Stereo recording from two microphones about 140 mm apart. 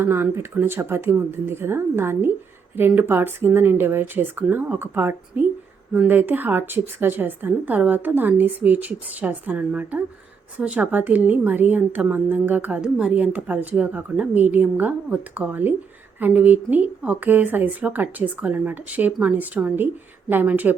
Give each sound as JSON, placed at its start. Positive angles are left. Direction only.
{"t": 0.0, "sound": "a woman's voice", "side_deg": -15}